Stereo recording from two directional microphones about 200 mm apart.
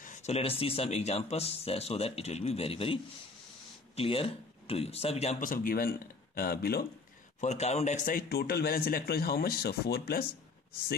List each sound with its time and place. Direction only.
0.0 s speech: 35° left (ahead or behind)
7.3 s speech: 35° left (ahead or behind); by 10.2 s 50° left (ahead or behind)